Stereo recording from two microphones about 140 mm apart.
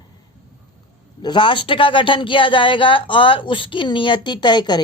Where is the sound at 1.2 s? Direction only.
35° left (ahead or behind).